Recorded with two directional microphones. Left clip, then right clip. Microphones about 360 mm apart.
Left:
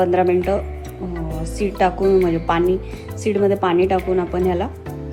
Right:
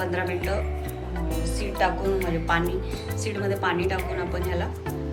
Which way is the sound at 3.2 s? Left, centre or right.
Centre.